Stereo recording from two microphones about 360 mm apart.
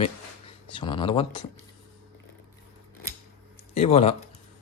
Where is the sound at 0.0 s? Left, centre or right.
Centre.